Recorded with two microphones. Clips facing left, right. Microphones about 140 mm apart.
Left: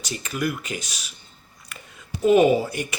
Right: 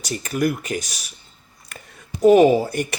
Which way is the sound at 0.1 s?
40° right (ahead or behind).